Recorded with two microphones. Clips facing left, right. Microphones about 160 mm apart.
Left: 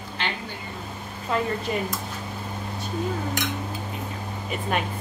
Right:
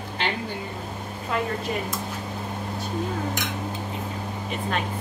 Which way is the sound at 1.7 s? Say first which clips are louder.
Left 3 dB; centre (ahead or behind).